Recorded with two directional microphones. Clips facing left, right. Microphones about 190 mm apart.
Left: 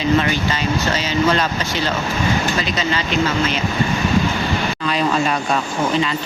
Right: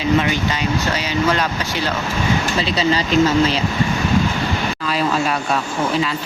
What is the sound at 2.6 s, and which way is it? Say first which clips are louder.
Speech: right 3 dB; 35° right (ahead or behind).